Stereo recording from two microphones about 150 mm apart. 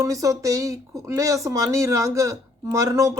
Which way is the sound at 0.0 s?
20° right (ahead or behind).